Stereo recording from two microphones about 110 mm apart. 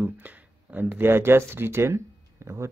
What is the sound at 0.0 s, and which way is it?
Speech, 15° right (ahead or behind).